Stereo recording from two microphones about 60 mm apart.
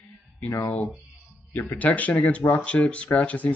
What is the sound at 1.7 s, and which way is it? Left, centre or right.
Speech, left.